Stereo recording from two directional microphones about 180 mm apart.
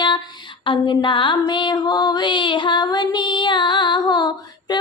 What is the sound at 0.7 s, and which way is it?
Female singing, 25° left (ahead or behind).